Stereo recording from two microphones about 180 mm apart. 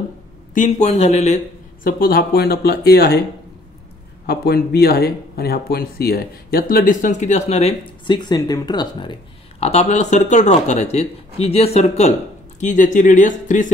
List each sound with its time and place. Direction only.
0.6 s speech: 40° left (ahead or behind); by 3.2 s 60° left (ahead or behind)
4.3 s speech: 60° left (ahead or behind); by 13.7 s 45° left (ahead or behind)